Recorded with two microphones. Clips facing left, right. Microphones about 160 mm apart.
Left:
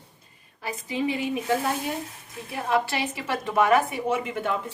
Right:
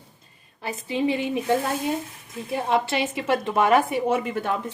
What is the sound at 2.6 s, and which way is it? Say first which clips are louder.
A woman's voice: right 2 dB; 25° right (ahead or behind).